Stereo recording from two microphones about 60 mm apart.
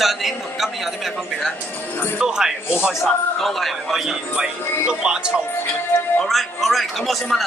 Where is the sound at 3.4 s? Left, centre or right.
Centre.